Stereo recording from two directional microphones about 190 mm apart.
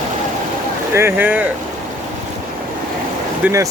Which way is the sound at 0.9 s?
10° right (ahead or behind).